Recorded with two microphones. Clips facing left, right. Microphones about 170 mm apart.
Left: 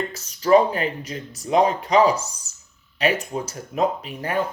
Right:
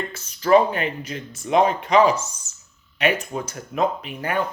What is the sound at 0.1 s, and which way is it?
Speech, 35° left (ahead or behind).